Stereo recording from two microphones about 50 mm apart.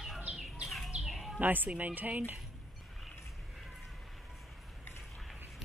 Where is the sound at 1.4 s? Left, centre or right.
Right.